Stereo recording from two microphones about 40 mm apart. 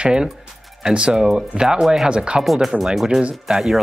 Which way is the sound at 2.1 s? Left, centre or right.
Right.